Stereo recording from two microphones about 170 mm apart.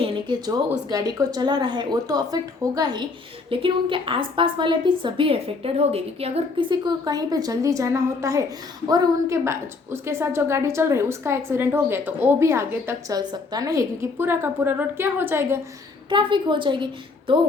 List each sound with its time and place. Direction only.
0.0 s a woman's voice: 25° right (ahead or behind)
16.0 s a woman's voice: 30° right (ahead or behind)